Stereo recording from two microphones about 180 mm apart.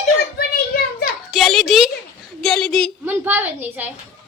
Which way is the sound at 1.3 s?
Centre (ahead or behind).